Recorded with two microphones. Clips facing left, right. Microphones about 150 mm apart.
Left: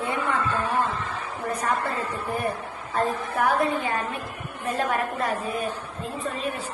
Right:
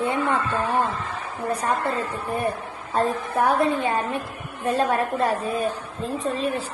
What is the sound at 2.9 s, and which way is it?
A woman's voice, 25° right (ahead or behind).